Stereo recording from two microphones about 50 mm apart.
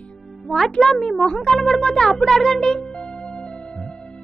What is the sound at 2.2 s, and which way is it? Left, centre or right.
Music, centre.